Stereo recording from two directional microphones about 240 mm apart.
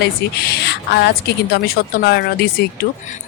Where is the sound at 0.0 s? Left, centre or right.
Left.